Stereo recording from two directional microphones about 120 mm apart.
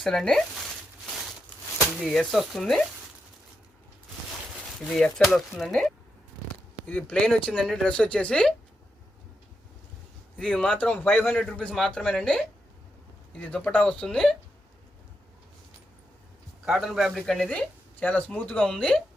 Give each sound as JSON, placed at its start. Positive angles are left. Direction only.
{"t": 0.0, "sound": "speech", "side_deg": 5}
{"t": 2.0, "sound": "speech", "side_deg": 5}
{"t": 4.8, "sound": "speech", "side_deg": 5}
{"t": 10.3, "sound": "speech", "side_deg": 5}
{"t": 16.6, "sound": "speech", "side_deg": 0}